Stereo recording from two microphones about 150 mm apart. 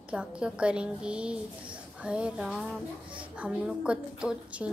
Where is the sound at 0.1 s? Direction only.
5° right (ahead or behind).